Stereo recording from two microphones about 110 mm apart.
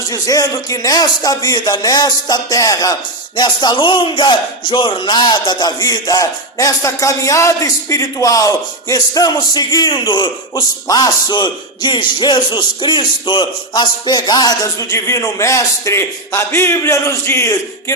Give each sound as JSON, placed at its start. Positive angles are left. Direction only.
{"t": 0.1, "sound": "a man's voice", "side_deg": 35}
{"t": 3.3, "sound": "a man's voice", "side_deg": 45}